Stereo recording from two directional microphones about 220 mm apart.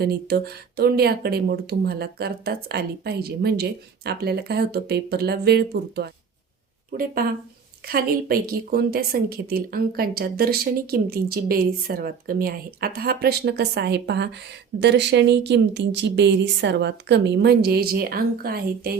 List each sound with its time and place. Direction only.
0.0 s a woman's voice: 45° right (ahead or behind)